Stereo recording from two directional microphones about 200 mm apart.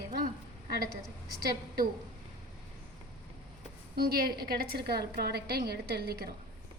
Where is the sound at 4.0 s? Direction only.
50° right (ahead or behind).